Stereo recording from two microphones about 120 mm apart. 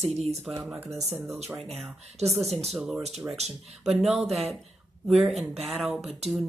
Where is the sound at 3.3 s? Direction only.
65° right (ahead or behind).